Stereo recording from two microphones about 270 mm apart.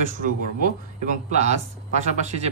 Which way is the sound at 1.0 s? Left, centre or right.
Right.